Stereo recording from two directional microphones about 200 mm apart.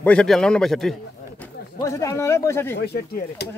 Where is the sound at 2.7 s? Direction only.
55° left (ahead or behind).